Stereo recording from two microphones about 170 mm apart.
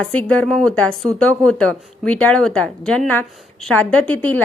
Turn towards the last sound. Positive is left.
turn(degrees=10)  # may be behind; listen again after turning